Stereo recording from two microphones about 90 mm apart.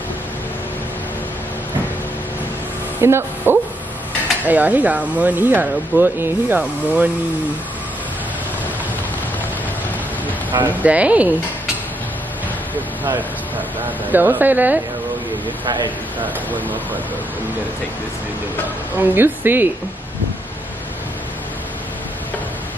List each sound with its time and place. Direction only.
3.0 s speech: 25° right (ahead or behind)
10.8 s speech: 15° right (ahead or behind)
13.8 s speech: 20° right (ahead or behind)
15.6 s a man's voice: 55° right (ahead or behind)
18.9 s speech: 25° right (ahead or behind)